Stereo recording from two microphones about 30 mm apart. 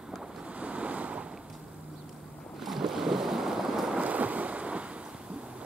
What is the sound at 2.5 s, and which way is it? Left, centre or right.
Boat, centre.